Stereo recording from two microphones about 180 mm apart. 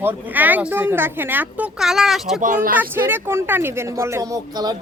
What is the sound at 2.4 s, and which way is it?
Speech, 45° right (ahead or behind).